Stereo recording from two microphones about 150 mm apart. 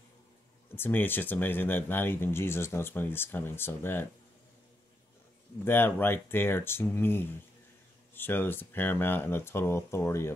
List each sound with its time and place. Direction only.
0.7 s speech: 15° left (ahead or behind)
5.7 s speech: 15° left (ahead or behind)